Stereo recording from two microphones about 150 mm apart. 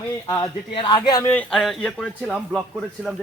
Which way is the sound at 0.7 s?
35° left (ahead or behind).